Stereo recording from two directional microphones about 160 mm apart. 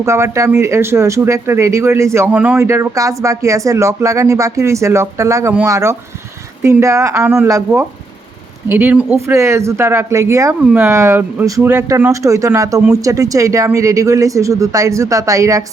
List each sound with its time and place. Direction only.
0.0 s speech: 20° right (ahead or behind)